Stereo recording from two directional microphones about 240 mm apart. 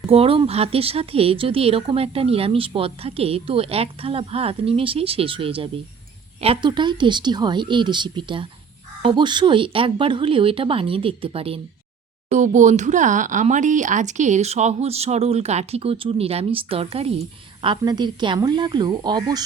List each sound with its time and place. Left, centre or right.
0.1 s speech: right